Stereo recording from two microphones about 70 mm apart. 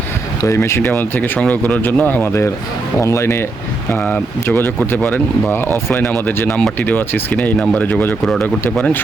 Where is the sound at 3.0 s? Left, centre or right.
Left.